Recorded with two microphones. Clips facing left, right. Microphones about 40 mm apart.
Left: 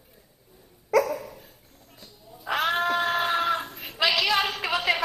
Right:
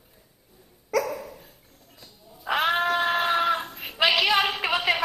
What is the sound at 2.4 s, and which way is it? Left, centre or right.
Cat, centre.